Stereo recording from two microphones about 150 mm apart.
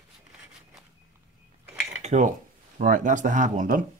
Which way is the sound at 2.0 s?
55° right (ahead or behind).